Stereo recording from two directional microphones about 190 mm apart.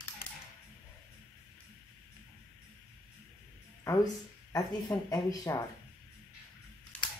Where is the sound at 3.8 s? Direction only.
15° left (ahead or behind).